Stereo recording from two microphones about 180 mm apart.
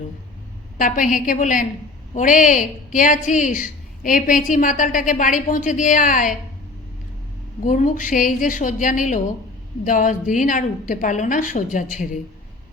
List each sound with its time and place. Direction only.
0.8 s a woman's voice: 45° left (ahead or behind)
7.6 s a woman's voice: 45° left (ahead or behind)